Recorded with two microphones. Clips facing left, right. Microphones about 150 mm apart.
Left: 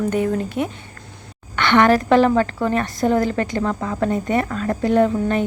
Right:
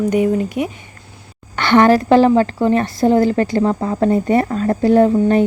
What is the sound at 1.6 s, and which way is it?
A woman's voice, 35° right (ahead or behind).